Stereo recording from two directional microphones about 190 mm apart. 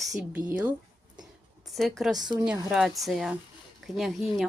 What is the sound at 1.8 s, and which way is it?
Speech, centre (ahead or behind).